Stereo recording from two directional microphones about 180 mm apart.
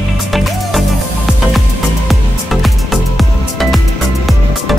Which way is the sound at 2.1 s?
Centre (ahead or behind).